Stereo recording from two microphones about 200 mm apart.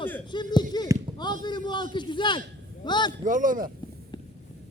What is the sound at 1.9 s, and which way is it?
A man's voice, 25° left (ahead or behind).